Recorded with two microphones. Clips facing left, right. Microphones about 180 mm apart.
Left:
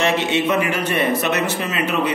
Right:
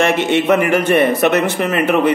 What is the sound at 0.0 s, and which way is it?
A man's voice, 50° right (ahead or behind).